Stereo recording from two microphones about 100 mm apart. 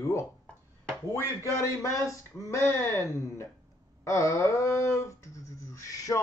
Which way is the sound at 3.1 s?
30° left (ahead or behind).